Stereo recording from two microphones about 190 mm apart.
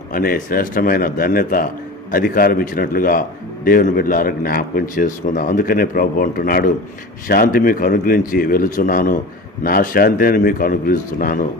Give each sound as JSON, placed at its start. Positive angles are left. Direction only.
{"t": 0.1, "sound": "a man's voice", "side_deg": 50}